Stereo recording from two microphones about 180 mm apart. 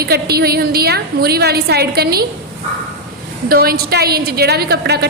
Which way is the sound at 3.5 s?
55° right (ahead or behind).